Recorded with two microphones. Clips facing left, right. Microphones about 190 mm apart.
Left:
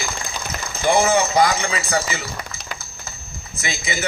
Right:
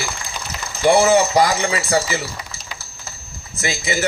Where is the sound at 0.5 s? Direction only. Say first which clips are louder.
Even; 50° left (ahead or behind).